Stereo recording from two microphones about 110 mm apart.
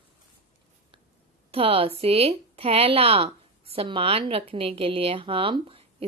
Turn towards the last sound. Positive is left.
turn(degrees=-55)  # may be behind; listen again after turning